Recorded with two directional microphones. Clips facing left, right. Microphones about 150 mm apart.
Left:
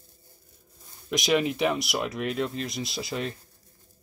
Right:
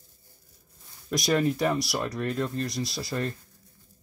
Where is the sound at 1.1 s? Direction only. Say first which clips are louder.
Even; 15° left (ahead or behind).